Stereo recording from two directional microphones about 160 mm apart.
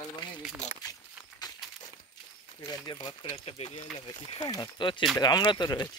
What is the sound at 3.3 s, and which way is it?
Speech, 40° left (ahead or behind).